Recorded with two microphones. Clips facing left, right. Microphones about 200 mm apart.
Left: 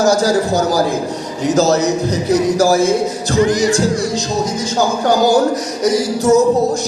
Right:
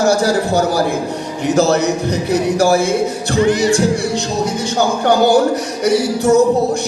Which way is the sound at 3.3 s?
35° left (ahead or behind).